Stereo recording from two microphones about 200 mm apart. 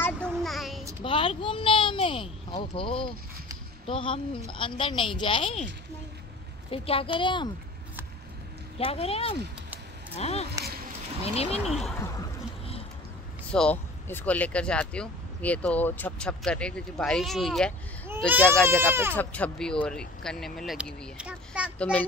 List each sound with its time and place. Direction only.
0.0 s child singing: 5° left (ahead or behind)
1.0 s a woman's voice: 25° left (ahead or behind)
6.7 s a woman's voice: 25° left (ahead or behind)
8.7 s a woman's voice: 30° left (ahead or behind)
11.7 s speech: centre (ahead or behind)
13.5 s speech: 5° left (ahead or behind)
18.3 s speech: 10° right (ahead or behind)
19.1 s speech: 5° left (ahead or behind)
21.7 s a child's voice: 10° left (ahead or behind)